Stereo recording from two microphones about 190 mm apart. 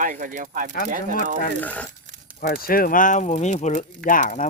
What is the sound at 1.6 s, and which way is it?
Speech, 10° left (ahead or behind).